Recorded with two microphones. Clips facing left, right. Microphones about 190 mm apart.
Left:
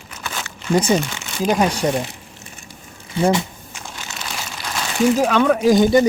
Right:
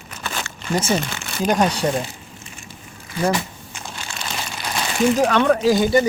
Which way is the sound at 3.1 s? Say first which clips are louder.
Left 3 dB; 25° left (ahead or behind).